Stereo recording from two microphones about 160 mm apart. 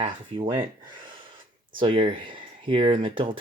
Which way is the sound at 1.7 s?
30° right (ahead or behind).